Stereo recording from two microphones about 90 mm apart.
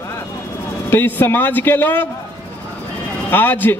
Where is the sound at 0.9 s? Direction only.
20° left (ahead or behind).